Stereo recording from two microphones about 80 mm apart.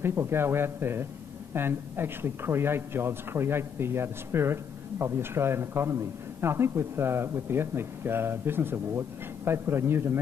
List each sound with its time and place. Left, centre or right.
0.0 s a man's voice: right